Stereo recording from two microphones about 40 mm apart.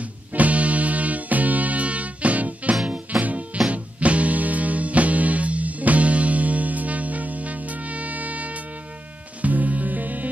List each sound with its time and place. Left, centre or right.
0.0 s music: right